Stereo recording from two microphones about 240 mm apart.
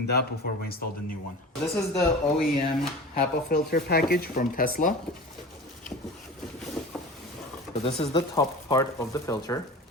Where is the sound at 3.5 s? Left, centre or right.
Left.